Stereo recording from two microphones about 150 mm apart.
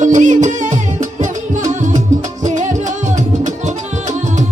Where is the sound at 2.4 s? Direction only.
50° right (ahead or behind).